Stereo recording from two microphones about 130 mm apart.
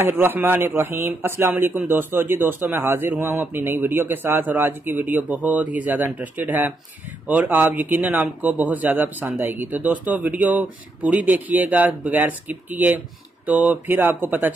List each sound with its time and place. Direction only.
0.0 s speech: 15° right (ahead or behind)